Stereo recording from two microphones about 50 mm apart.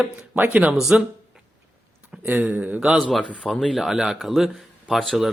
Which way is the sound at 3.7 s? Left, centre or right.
Centre.